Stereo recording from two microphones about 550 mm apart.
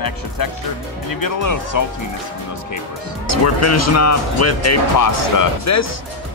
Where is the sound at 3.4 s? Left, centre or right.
Left.